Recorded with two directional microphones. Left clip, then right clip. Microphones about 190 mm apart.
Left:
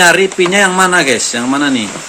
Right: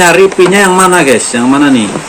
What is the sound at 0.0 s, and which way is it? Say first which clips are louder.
Speech: right 4 dB; 45° left (ahead or behind).